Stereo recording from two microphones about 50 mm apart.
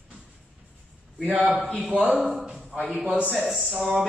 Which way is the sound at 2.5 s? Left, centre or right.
Centre.